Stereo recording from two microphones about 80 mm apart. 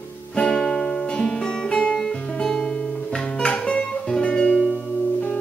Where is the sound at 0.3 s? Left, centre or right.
Centre.